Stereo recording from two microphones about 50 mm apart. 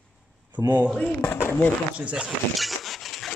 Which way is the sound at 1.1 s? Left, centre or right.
Left.